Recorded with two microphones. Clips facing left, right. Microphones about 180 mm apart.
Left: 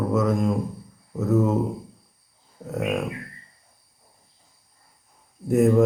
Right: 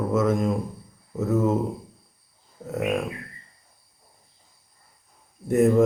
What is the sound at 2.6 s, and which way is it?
Mantra, centre (ahead or behind).